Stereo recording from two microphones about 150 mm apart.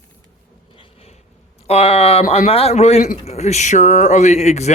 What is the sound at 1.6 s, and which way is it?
Speech, 40° left (ahead or behind).